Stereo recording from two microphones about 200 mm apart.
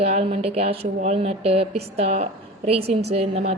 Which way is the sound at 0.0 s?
30° right (ahead or behind).